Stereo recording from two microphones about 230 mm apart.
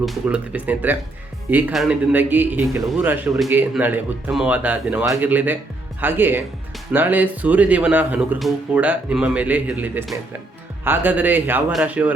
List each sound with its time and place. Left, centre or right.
0.0 s speech: centre